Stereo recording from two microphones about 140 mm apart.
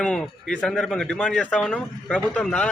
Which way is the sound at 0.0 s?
5° left (ahead or behind).